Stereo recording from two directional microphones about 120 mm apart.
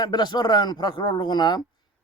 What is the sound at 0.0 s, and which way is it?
Speech, 35° left (ahead or behind).